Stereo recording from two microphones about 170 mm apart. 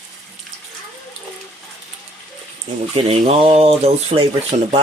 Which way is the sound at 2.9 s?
35° right (ahead or behind).